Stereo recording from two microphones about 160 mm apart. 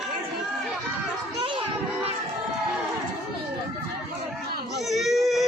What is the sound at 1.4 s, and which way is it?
Children playing, 30° right (ahead or behind).